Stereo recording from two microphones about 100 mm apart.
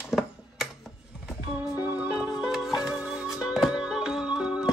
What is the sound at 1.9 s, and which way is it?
Music, 15° right (ahead or behind).